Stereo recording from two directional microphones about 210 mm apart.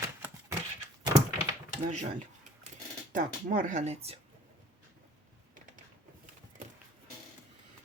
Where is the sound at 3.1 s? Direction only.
40° right (ahead or behind).